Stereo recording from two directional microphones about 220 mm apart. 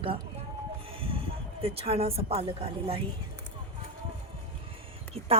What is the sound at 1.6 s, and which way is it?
A woman's voice, 25° right (ahead or behind).